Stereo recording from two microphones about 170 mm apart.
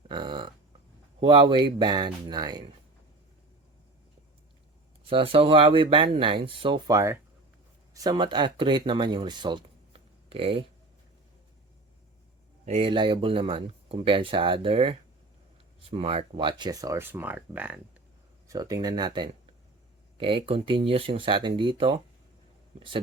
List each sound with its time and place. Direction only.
0.1 s a sound: 30° right (ahead or behind)
1.2 s speech: 30° right (ahead or behind)
5.0 s speech: 35° right (ahead or behind)
12.6 s speech: 35° right (ahead or behind); by 17.7 s 10° right (ahead or behind)
18.4 s speech: 20° right (ahead or behind)